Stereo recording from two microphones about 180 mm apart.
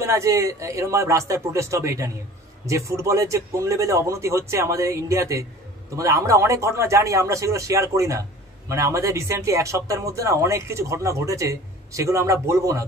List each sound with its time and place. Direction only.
0.0 s speech: 15° right (ahead or behind)